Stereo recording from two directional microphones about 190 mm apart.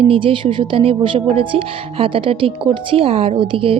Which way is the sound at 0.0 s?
30° right (ahead or behind).